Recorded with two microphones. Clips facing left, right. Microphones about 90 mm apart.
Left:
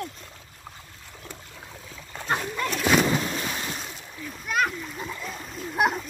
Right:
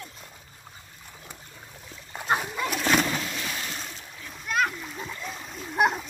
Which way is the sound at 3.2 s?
30° left (ahead or behind).